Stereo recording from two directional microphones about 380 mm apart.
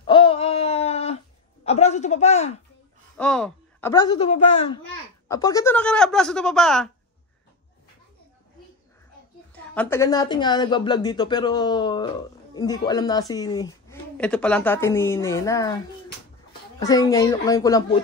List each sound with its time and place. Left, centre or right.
0.0 s a sound: centre
3.2 s a woman's voice: centre
9.5 s a woman's voice: centre
16.8 s a woman's voice: centre